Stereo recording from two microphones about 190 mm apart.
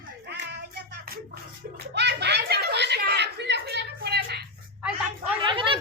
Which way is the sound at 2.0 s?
60° right (ahead or behind).